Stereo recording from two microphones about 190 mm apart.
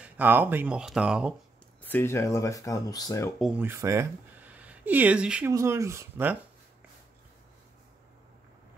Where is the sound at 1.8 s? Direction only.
10° left (ahead or behind).